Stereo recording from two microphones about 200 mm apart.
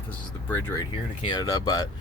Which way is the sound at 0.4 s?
10° left (ahead or behind).